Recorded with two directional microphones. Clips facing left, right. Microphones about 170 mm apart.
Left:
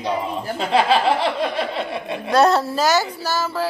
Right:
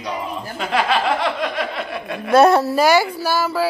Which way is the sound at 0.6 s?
30° left (ahead or behind).